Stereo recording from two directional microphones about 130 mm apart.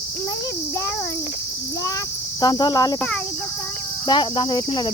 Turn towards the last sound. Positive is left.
turn(degrees=35)  # may be behind; listen again after turning